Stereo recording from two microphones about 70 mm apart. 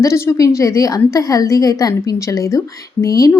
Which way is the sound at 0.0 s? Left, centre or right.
Left.